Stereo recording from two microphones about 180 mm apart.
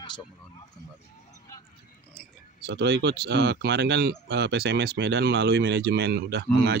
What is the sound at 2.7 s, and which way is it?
Speech, 70° right (ahead or behind).